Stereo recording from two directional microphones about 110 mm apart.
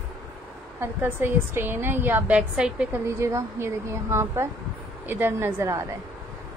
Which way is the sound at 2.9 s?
25° right (ahead or behind).